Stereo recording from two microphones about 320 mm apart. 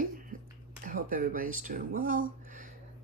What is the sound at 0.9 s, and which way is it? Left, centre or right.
Speech, right.